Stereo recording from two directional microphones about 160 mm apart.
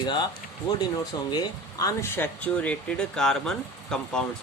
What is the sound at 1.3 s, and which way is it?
Speech, 25° left (ahead or behind).